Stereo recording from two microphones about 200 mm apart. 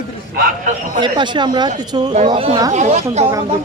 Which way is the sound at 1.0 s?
25° right (ahead or behind).